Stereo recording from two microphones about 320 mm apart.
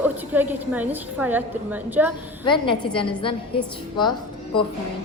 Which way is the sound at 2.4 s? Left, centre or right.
Centre.